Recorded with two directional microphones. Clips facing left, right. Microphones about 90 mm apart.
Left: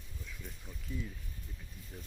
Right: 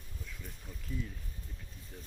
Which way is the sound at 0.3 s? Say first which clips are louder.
Left 1 dB; centre (ahead or behind).